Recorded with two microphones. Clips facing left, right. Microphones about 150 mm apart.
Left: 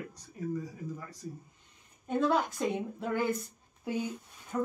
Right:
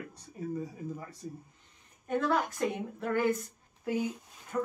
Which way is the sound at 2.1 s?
15° left (ahead or behind).